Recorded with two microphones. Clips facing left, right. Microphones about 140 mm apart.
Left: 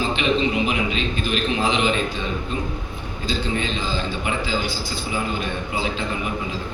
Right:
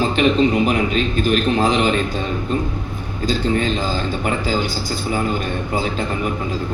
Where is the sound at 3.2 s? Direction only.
45° right (ahead or behind).